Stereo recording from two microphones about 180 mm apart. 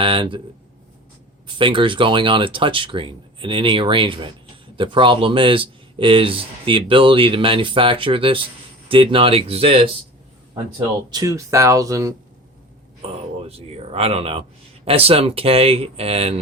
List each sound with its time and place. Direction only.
0.0 s speech: 30° right (ahead or behind)
1.5 s speech: 25° right (ahead or behind)
11.1 s speech: 20° right (ahead or behind)
13.5 s speech: 35° right (ahead or behind)